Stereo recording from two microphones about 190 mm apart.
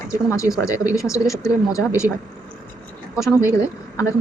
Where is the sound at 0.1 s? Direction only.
15° left (ahead or behind).